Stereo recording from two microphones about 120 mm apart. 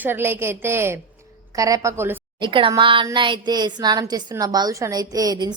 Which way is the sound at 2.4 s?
45° right (ahead or behind).